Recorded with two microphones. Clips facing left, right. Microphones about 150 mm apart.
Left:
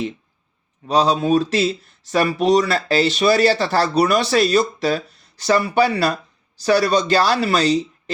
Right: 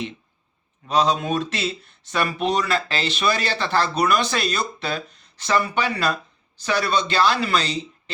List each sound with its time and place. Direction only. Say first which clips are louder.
0.9 s speech: left 4 dB; 35° left (ahead or behind)